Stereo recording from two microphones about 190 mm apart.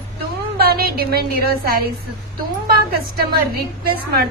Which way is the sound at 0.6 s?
55° right (ahead or behind).